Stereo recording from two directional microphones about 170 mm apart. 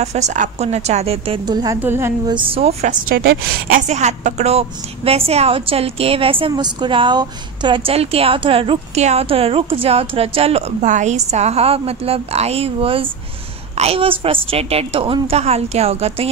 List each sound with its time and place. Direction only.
0.0 s a woman's voice: 40° right (ahead or behind)
1.4 s a woman's voice: 25° right (ahead or behind)
2.3 s a woman's voice: 30° right (ahead or behind)
3.1 s a woman's voice: 65° right (ahead or behind)
3.8 s a woman's voice: 45° right (ahead or behind)